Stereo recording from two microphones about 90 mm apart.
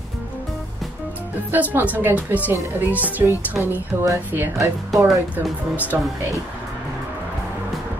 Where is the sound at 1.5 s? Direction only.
20° right (ahead or behind).